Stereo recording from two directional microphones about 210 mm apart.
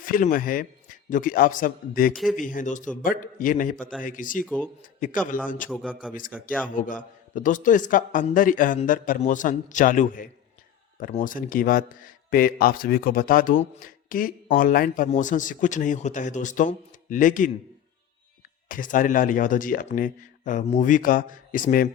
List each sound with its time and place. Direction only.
0.0 s a man's voice: 40° left (ahead or behind)
4.4 s speech: 5° left (ahead or behind)
4.8 s speech: 40° left (ahead or behind)
5.8 s a man's voice: 5° right (ahead or behind)
6.7 s speech: 40° left (ahead or behind)
18.7 s speech: 40° left (ahead or behind)